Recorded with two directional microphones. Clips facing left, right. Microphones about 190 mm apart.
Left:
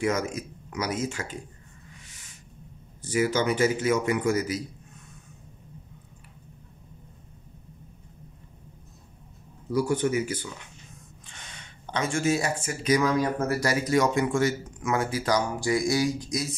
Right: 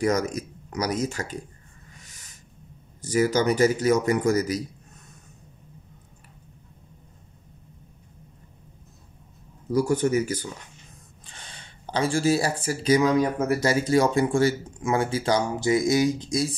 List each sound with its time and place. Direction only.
0.0 s a man's voice: 40° right (ahead or behind)
3.0 s a man's voice: 40° right (ahead or behind)
9.7 s a man's voice: 40° right (ahead or behind)